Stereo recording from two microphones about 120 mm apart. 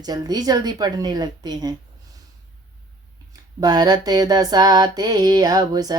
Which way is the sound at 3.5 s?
35° right (ahead or behind).